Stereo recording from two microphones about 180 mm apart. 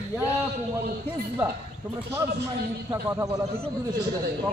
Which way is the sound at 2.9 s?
15° right (ahead or behind).